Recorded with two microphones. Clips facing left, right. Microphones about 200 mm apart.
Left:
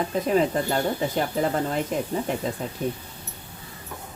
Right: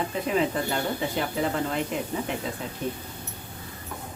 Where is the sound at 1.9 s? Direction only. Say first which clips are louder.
Left 3 dB; 40° left (ahead or behind).